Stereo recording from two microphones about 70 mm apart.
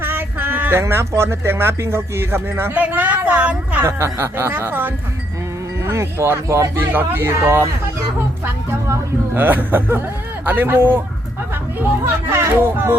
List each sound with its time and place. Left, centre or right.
0.0 s female singing: right
0.8 s speech: right
2.7 s a woman's voice: right
3.8 s speech: right
5.8 s speech: right
6.7 s speech: right
9.3 s a woman's voice: right
12.3 s speech: right